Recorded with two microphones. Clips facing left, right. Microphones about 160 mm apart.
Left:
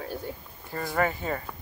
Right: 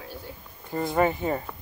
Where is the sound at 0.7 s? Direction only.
20° right (ahead or behind).